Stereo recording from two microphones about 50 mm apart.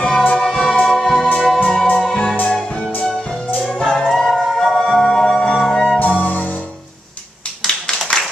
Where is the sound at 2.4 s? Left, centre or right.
Centre.